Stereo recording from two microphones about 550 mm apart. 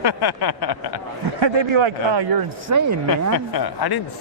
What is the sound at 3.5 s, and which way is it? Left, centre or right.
Speech, left.